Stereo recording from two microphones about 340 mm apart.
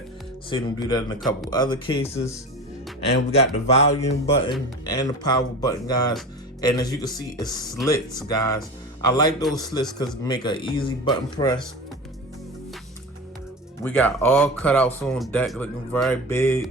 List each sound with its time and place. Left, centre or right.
0.5 s speech: centre
3.3 s speech: centre
13.8 s speech: centre